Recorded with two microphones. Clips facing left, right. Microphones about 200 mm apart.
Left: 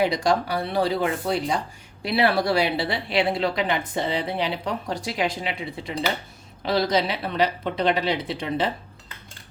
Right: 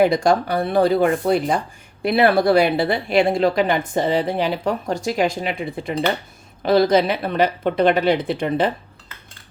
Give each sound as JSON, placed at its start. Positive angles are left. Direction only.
{"t": 0.0, "sound": "speech", "side_deg": -50}